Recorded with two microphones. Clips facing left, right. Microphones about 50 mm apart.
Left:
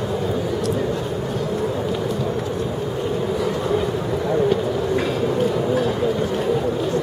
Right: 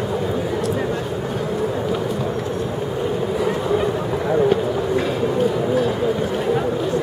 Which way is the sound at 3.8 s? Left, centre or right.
Centre.